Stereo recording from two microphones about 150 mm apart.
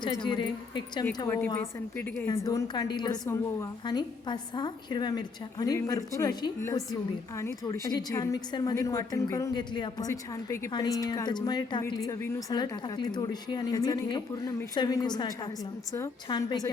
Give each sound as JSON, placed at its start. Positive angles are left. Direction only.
{"t": 0.0, "sound": "speech", "side_deg": 30}
{"t": 2.2, "sound": "a woman's voice", "side_deg": 20}